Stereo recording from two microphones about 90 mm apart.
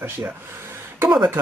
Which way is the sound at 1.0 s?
25° right (ahead or behind).